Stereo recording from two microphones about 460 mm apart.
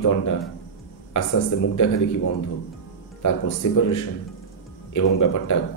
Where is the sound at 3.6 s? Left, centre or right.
Left.